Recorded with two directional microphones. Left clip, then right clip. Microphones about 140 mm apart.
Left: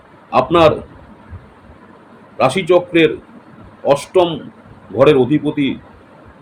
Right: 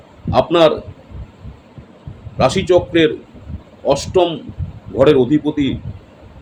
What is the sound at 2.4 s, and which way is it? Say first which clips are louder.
Speech: even; 10° right (ahead or behind).